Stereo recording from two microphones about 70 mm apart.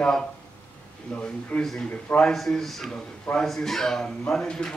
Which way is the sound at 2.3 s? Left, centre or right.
Centre.